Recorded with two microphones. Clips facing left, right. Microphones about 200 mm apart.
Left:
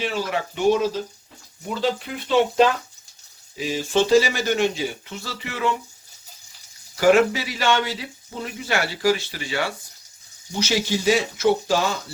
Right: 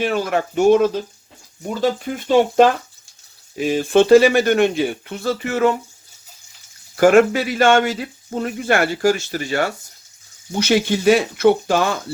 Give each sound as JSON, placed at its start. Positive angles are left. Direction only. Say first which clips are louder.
{"t": 0.0, "sound": "speech", "louder": "right 6 dB", "side_deg": -55}
{"t": 6.9, "sound": "speech", "louder": "right 4 dB", "side_deg": -50}
{"t": 10.5, "sound": "speech", "louder": "right 6 dB", "side_deg": -55}